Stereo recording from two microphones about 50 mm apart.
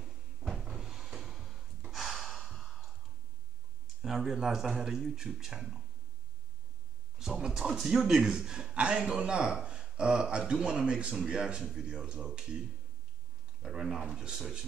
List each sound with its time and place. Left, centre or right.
0.5 s cupboard open or close: centre
1.8 s gasp: centre
4.0 s a sound: centre
4.4 s a man's voice: centre
7.2 s a man's voice: centre
13.6 s a man's voice: centre